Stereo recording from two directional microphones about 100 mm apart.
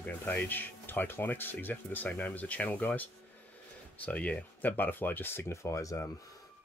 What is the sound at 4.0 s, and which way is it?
Speech, 15° left (ahead or behind).